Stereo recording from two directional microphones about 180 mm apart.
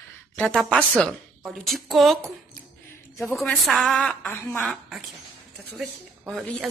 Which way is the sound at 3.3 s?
Centre (ahead or behind).